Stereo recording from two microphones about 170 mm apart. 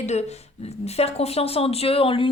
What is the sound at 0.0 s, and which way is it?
A woman's voice, 40° left (ahead or behind).